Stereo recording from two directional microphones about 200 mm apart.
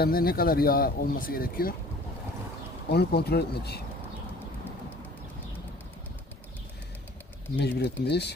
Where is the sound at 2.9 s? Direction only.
55° left (ahead or behind).